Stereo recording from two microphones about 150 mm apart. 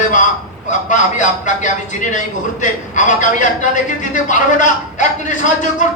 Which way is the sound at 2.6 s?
55° left (ahead or behind).